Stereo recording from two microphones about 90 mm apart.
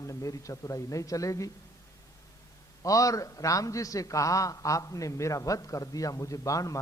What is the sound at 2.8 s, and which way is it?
A man's voice, 40° left (ahead or behind).